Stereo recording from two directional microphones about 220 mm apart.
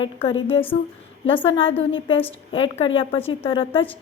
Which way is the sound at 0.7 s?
25° left (ahead or behind).